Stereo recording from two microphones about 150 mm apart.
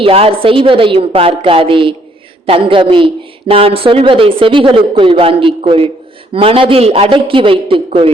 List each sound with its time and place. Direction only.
0.0 s speech: 40° right (ahead or behind)